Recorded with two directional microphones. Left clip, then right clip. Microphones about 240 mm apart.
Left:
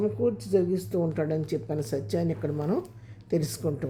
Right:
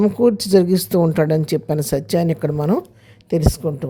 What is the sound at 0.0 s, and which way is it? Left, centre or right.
Speech, right.